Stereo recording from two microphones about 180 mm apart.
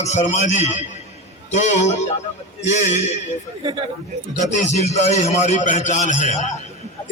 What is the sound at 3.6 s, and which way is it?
Speech, 30° right (ahead or behind).